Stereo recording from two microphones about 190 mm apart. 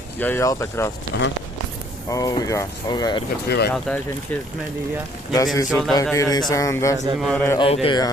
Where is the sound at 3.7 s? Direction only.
5° left (ahead or behind).